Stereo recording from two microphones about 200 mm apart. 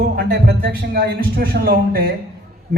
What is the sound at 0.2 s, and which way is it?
A man's voice, 50° right (ahead or behind).